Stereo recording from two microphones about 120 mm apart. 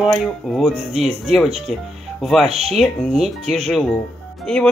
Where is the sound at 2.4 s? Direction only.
60° right (ahead or behind).